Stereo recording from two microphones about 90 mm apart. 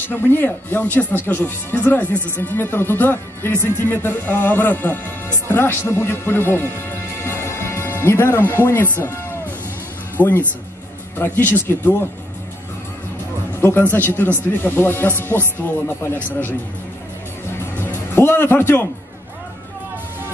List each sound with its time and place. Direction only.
0.1 s speech: 25° left (ahead or behind)
7.2 s music: 30° left (ahead or behind)
8.9 s speech: 25° left (ahead or behind)
13.6 s speech: 25° left (ahead or behind)
17.7 s music: 25° left (ahead or behind)